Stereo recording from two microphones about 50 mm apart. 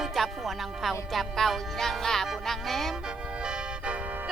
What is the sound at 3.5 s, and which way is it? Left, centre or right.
Music, right.